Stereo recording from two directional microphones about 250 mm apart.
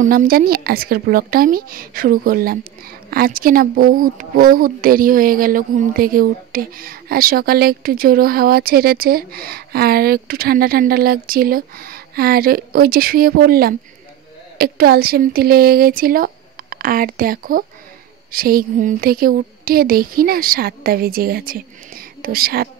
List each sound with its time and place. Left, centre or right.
0.0 s speech: right